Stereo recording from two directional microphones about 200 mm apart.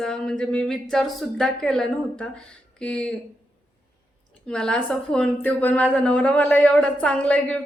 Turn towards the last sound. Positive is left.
turn(degrees=5)  # may be behind; listen again after turning